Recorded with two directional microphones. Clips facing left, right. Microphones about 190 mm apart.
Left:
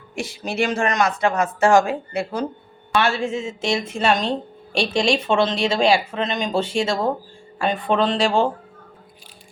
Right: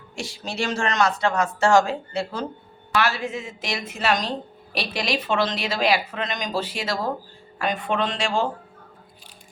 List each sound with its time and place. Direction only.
0.2 s speech: 55° left (ahead or behind)
0.8 s speech: 15° left (ahead or behind)
2.9 s a man's voice: 25° left (ahead or behind)